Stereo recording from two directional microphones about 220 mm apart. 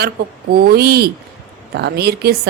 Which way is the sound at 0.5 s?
45° right (ahead or behind).